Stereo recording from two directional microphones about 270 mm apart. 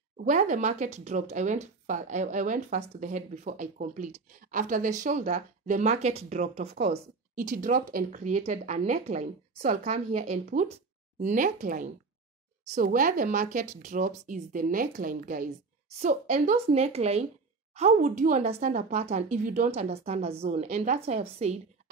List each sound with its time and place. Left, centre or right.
0.2 s a woman's voice: right